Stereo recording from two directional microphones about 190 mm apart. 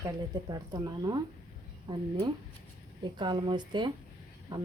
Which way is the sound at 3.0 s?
25° right (ahead or behind).